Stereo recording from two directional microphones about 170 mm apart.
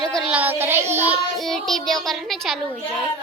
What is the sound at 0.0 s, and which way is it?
Child singing, centre (ahead or behind).